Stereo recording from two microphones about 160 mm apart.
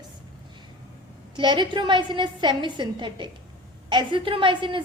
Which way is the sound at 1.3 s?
30° right (ahead or behind).